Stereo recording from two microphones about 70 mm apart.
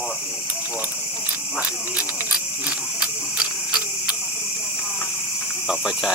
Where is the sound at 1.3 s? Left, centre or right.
Centre.